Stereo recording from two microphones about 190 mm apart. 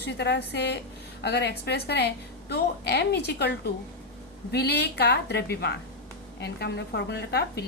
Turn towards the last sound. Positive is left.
turn(degrees=60)  # may be behind; listen again after turning